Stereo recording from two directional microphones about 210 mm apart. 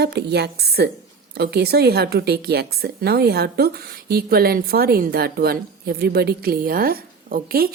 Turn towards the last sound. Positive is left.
turn(degrees=-45)  # may be behind; listen again after turning